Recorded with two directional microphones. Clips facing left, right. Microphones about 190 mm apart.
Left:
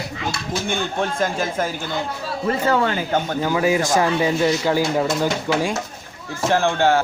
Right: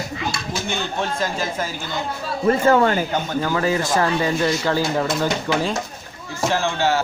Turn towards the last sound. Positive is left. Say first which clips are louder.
# left 3 dB
turn(degrees=55)  # may be behind; listen again after turning